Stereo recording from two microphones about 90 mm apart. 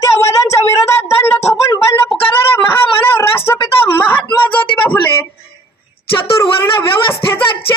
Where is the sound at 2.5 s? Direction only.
25° left (ahead or behind).